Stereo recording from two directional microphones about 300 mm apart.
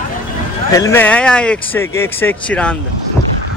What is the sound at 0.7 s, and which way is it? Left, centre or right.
Speech, centre.